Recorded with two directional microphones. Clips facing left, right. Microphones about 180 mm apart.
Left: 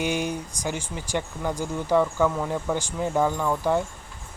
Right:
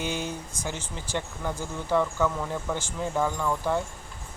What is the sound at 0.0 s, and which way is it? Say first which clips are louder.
Speech: left 5 dB; 15° left (ahead or behind).